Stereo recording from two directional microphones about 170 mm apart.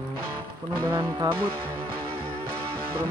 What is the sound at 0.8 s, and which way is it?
Speech, 15° right (ahead or behind).